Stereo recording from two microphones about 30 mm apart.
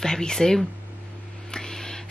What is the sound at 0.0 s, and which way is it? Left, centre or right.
Speech, centre.